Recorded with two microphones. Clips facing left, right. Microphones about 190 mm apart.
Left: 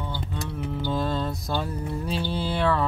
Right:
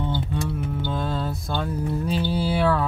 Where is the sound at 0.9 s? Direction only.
Centre (ahead or behind).